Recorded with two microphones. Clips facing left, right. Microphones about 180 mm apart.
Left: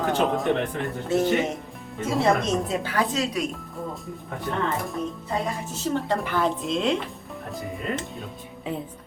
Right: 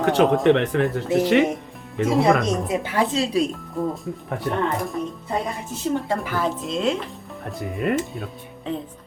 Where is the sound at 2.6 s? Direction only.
20° right (ahead or behind).